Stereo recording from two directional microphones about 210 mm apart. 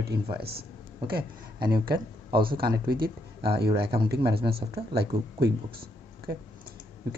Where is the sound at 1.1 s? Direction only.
45° right (ahead or behind).